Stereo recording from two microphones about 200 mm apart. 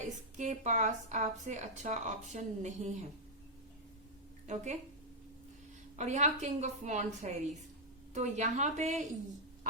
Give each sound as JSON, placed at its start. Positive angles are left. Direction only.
{"t": 0.0, "sound": "a woman's voice", "side_deg": -35}
{"t": 4.4, "sound": "a woman's voice", "side_deg": -35}
{"t": 6.0, "sound": "a woman's voice", "side_deg": -35}